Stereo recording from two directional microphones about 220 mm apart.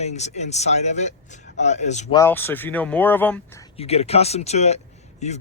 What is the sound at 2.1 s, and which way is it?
Speech, 10° left (ahead or behind).